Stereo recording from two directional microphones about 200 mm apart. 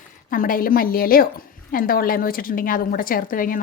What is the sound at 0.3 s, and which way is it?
A woman's voice, 45° left (ahead or behind).